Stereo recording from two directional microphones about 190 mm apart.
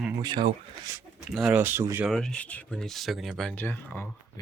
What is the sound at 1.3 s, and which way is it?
Speech, 5° right (ahead or behind).